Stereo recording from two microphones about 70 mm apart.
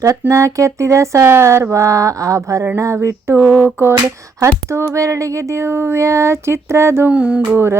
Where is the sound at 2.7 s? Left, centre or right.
Right.